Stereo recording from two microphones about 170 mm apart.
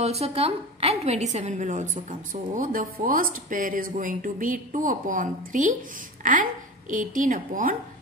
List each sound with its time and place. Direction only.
0.0 s a woman's voice: 40° right (ahead or behind)